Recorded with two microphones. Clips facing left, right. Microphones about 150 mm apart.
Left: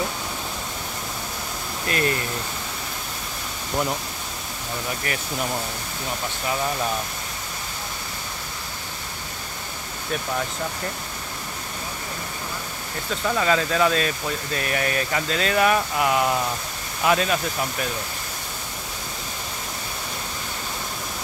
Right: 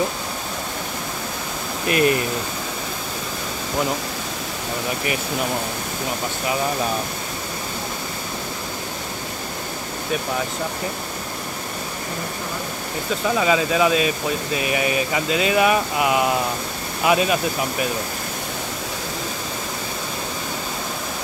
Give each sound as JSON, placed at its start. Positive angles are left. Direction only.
{"t": 1.9, "sound": "speech", "side_deg": -15}
{"t": 13.4, "sound": "speech", "side_deg": -10}